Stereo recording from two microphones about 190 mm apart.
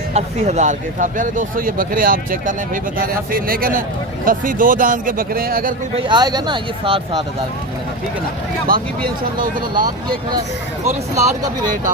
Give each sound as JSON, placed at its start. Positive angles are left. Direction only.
{"t": 0.1, "sound": "speech", "side_deg": -35}
{"t": 6.1, "sound": "speech", "side_deg": -20}
{"t": 8.7, "sound": "speech", "side_deg": -45}
{"t": 10.8, "sound": "speech", "side_deg": -15}